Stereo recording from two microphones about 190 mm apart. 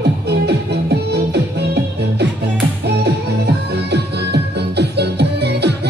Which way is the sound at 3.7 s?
60° right (ahead or behind).